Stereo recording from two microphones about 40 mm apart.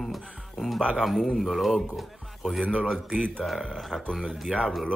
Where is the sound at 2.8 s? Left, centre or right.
Centre.